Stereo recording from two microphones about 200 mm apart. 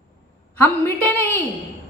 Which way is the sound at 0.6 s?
10° left (ahead or behind).